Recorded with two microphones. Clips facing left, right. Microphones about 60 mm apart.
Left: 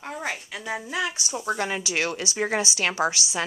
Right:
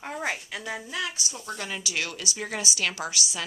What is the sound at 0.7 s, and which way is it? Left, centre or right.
A woman's voice, left.